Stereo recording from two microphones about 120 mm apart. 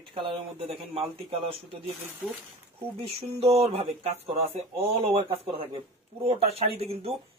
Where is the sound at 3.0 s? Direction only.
55° right (ahead or behind).